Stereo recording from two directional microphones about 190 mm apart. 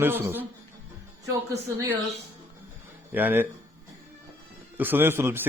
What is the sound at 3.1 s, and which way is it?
Speech, 10° right (ahead or behind).